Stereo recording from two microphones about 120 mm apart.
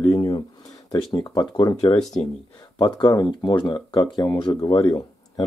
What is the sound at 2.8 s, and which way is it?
Speech, 35° left (ahead or behind).